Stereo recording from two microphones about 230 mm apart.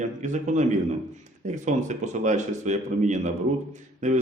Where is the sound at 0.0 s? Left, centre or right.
Right.